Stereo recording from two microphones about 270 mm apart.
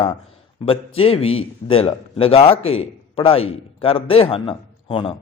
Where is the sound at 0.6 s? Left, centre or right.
Left.